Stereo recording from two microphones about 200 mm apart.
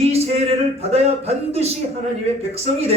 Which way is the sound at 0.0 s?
30° right (ahead or behind).